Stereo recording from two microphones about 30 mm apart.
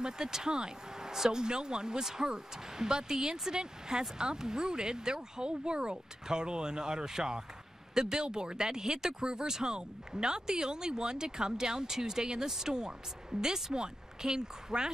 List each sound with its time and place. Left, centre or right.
0.0 s speech: right